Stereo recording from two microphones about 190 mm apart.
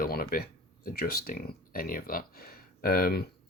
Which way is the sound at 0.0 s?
50° left (ahead or behind).